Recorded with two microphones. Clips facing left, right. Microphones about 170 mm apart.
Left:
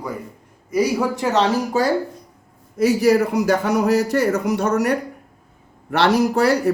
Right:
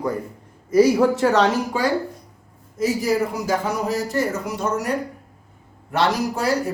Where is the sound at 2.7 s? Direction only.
70° left (ahead or behind).